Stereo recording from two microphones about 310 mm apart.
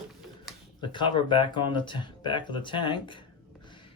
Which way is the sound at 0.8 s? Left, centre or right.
Centre.